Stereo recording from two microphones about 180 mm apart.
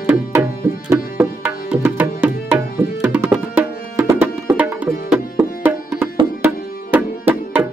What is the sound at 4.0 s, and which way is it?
Music, 15° right (ahead or behind).